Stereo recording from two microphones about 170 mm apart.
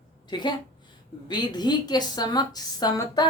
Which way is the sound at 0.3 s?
25° left (ahead or behind).